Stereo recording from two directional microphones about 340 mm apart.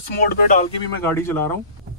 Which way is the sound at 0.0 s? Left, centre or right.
Left.